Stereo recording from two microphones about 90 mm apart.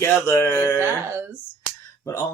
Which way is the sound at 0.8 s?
25° right (ahead or behind).